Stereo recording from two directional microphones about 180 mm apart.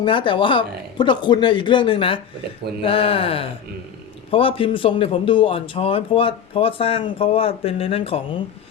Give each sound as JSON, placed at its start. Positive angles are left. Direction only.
{"t": 0.0, "sound": "speech", "side_deg": 25}